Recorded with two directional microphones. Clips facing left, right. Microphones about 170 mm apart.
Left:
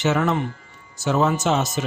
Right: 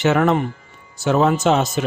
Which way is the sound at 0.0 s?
60° right (ahead or behind).